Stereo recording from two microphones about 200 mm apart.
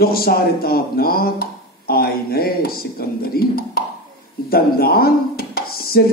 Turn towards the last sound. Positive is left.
turn(degrees=50)  # may be behind; listen again after turning